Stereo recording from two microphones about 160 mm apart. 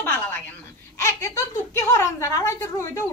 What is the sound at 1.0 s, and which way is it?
Speech, 20° left (ahead or behind).